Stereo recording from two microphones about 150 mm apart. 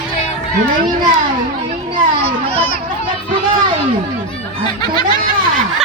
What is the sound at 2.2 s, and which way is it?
Children playing, 40° right (ahead or behind).